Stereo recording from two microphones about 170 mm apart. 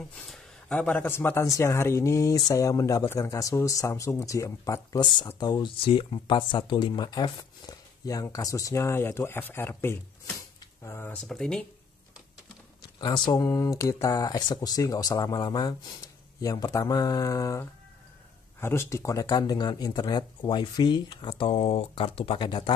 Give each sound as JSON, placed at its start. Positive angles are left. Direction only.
{"t": 0.1, "sound": "a man's voice", "side_deg": 5}
{"t": 11.2, "sound": "speech", "side_deg": 5}
{"t": 13.0, "sound": "speech", "side_deg": 25}